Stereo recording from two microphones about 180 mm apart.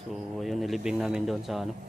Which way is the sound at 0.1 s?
Centre (ahead or behind).